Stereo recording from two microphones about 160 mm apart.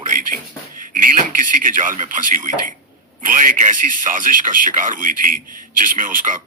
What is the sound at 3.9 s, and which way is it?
A man's voice, 55° right (ahead or behind).